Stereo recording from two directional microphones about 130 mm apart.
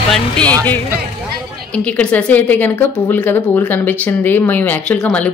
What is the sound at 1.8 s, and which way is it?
A woman's voice, 10° left (ahead or behind).